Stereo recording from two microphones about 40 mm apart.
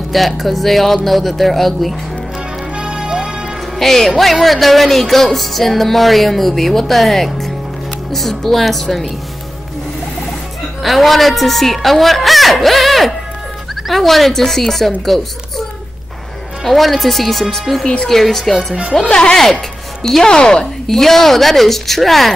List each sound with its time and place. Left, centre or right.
0.1 s music: centre
2.7 s music: right
3.7 s speech: centre
4.2 s music: centre
10.8 s music: centre
15.0 s a child's voice: centre
16.6 s music: centre
19.0 s speech: left
20.0 s speech: centre
20.8 s music: centre